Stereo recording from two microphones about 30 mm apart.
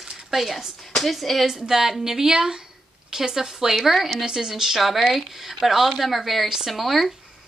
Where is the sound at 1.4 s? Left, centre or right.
Right; by 7.1 s centre.